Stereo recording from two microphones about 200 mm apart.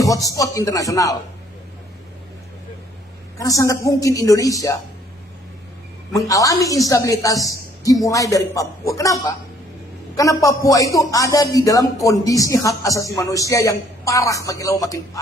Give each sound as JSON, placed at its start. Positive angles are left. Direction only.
{"t": 0.0, "sound": "speech", "side_deg": 15}
{"t": 3.3, "sound": "speech", "side_deg": 15}
{"t": 6.2, "sound": "speech", "side_deg": 15}